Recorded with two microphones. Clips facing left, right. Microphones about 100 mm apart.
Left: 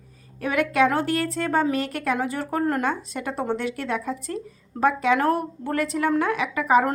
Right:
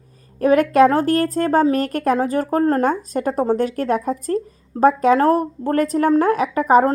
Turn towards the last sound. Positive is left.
turn(degrees=-40)  # may be behind; listen again after turning